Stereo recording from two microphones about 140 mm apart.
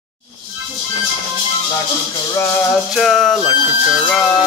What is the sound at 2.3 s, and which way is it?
Music, 20° left (ahead or behind).